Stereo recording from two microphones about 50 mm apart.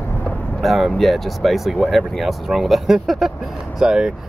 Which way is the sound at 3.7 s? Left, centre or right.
Centre.